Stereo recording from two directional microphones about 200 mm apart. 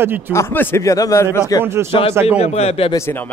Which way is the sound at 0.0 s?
10° right (ahead or behind).